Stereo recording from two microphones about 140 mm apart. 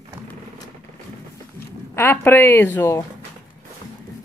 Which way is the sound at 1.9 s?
15° left (ahead or behind).